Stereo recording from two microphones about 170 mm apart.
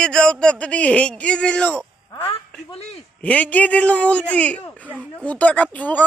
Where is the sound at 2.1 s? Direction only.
30° left (ahead or behind).